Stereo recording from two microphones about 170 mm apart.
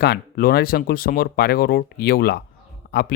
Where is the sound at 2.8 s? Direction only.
65° left (ahead or behind).